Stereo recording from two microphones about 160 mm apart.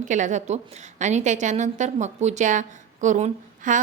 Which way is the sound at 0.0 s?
50° right (ahead or behind).